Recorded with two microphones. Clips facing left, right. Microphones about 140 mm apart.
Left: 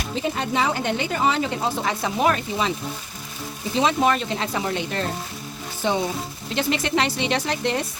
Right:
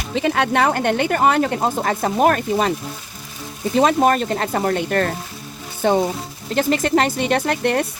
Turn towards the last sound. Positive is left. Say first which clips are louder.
# right 5 dB
turn(degrees=-55)  # may be behind; listen again after turning